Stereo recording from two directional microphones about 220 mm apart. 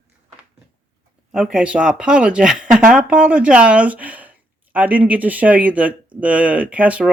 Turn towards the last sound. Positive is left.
turn(degrees=-5)  # may be behind; listen again after turning